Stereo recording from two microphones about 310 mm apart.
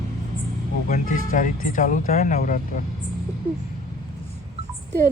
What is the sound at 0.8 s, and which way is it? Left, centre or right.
Speech, left.